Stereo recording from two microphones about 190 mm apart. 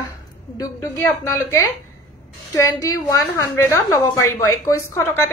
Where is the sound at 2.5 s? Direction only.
15° left (ahead or behind).